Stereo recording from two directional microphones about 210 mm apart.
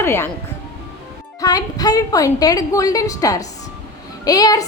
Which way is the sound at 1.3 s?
15° left (ahead or behind).